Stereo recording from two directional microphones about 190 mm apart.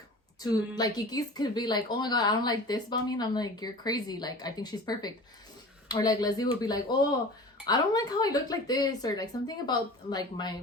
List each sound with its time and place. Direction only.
0.3 s a woman's voice: 20° left (ahead or behind)